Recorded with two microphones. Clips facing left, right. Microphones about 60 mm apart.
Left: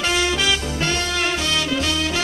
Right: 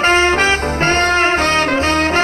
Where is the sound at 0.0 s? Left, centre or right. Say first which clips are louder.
Right 8 dB; right.